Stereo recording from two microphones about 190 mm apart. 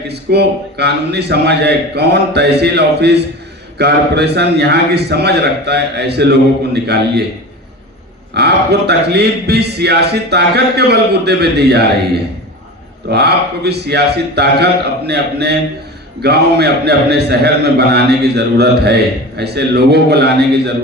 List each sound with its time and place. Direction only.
0.1 s a man's voice: 60° right (ahead or behind)
8.3 s a man's voice: 60° right (ahead or behind)
13.1 s a man's voice: 60° right (ahead or behind)